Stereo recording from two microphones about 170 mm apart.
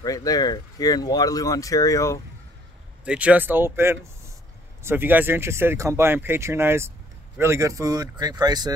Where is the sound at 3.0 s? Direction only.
5° right (ahead or behind); by 8.7 s 25° right (ahead or behind).